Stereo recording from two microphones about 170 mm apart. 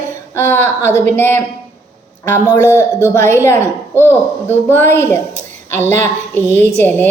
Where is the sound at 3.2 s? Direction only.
15° left (ahead or behind).